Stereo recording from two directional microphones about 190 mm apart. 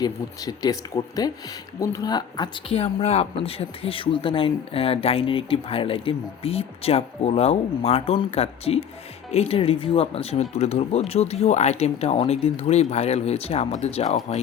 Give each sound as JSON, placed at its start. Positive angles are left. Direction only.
{"t": 0.0, "sound": "speech", "side_deg": 20}